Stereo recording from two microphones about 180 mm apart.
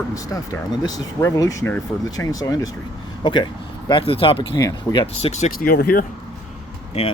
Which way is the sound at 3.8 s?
30° left (ahead or behind).